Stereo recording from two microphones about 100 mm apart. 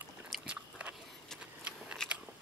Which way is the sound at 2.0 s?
5° left (ahead or behind).